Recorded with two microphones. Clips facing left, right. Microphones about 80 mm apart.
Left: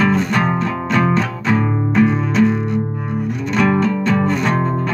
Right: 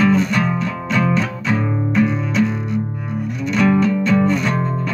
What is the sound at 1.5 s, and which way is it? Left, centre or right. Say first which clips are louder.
Music: left 3 dB; left.